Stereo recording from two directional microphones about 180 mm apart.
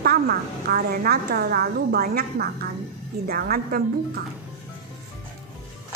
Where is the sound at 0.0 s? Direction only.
55° right (ahead or behind).